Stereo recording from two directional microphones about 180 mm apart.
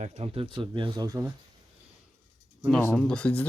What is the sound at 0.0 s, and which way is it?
Speech, 35° right (ahead or behind).